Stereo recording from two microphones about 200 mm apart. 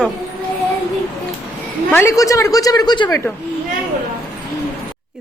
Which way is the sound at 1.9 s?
15° left (ahead or behind).